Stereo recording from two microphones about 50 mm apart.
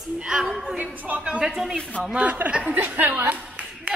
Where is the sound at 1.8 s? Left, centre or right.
Centre.